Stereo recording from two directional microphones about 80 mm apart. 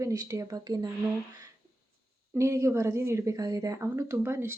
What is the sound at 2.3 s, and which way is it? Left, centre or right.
A woman's voice, right.